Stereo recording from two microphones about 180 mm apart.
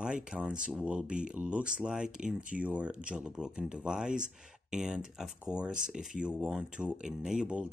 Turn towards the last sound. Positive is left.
turn(degrees=-5)  # may be behind; listen again after turning